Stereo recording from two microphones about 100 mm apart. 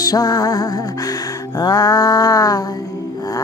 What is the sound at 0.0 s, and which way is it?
Music, 40° left (ahead or behind).